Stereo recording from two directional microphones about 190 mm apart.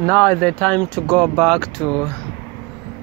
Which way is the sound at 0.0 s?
5° left (ahead or behind).